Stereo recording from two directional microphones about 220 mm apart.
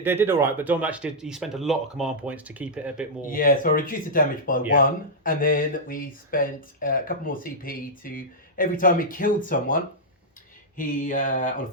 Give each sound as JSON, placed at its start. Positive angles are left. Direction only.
{"t": 0.0, "sound": "speech", "side_deg": -10}
{"t": 3.2, "sound": "speech", "side_deg": 40}